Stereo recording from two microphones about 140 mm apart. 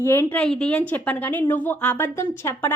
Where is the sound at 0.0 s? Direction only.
15° left (ahead or behind).